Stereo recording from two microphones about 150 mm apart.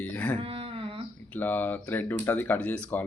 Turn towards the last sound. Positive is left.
turn(degrees=10)  # may be behind; listen again after turning